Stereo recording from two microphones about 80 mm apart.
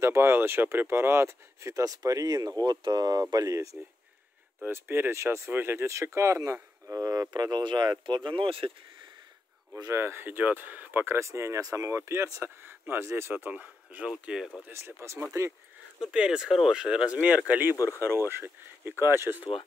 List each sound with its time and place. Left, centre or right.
0.0 s speech: right
3.8 s speech: centre
4.6 s speech: right
7.6 s speech: right
9.9 s speech: right
11.1 s speech: right; by 14.1 s centre
14.2 s speech: centre
14.7 s speech: right
16.0 s speech: centre
17.7 s speech: left
18.3 s speech: right